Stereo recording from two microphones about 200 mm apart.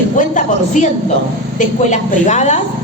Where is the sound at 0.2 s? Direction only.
40° left (ahead or behind).